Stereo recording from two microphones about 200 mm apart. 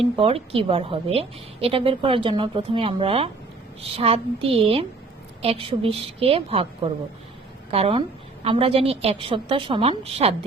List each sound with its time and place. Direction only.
0.0 s a woman's voice: 30° right (ahead or behind)